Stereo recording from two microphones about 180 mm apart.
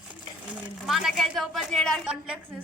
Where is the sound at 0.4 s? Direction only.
5° right (ahead or behind).